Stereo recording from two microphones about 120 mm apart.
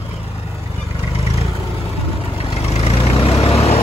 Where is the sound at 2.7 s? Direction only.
60° left (ahead or behind).